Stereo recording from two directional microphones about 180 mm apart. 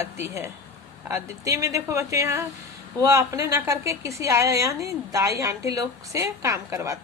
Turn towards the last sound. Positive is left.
turn(degrees=-15)  # may be behind; listen again after turning